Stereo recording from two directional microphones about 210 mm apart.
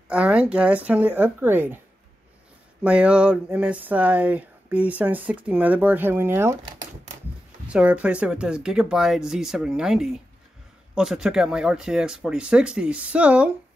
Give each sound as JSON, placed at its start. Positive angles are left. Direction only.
{"t": 0.1, "sound": "speech", "side_deg": -5}
{"t": 2.8, "sound": "speech", "side_deg": -5}
{"t": 7.6, "sound": "speech", "side_deg": -5}